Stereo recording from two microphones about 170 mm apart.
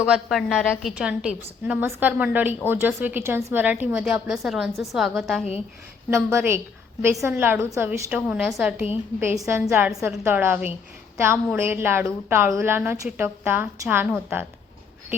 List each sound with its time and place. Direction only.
0.0 s speech: 5° right (ahead or behind)
6.1 s speech: 15° right (ahead or behind)